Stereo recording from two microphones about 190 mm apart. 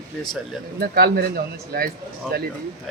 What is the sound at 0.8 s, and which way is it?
Speech, 55° right (ahead or behind).